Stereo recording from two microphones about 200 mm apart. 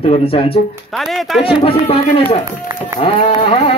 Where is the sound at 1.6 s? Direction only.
30° left (ahead or behind).